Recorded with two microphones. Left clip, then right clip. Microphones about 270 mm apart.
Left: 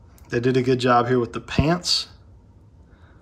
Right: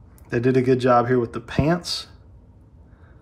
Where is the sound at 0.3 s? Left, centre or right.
Centre.